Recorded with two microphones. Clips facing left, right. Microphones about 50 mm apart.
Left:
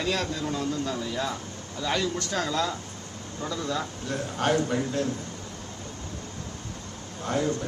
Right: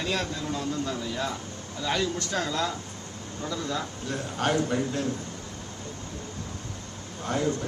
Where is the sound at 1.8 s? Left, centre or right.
Left.